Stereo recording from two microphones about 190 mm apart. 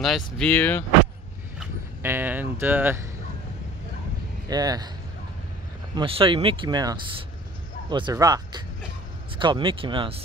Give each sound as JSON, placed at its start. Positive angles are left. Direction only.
{"t": 0.0, "sound": "speech", "side_deg": 5}
{"t": 1.6, "sound": "speech", "side_deg": -10}
{"t": 4.5, "sound": "speech", "side_deg": -20}
{"t": 5.9, "sound": "speech", "side_deg": -30}